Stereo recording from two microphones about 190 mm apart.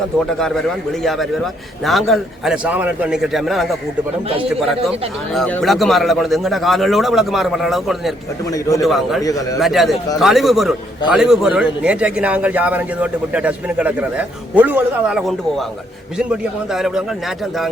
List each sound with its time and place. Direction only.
0.3 s speech: 5° left (ahead or behind)
5.3 s speech: centre (ahead or behind)
8.4 s a man's voice: 20° left (ahead or behind)
8.8 s a man's voice: centre (ahead or behind)